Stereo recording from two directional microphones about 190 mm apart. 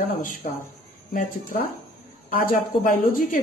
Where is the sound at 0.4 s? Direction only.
40° left (ahead or behind).